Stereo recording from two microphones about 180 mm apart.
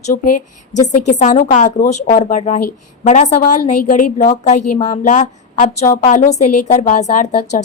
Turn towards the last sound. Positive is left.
turn(degrees=40)  # may be behind; listen again after turning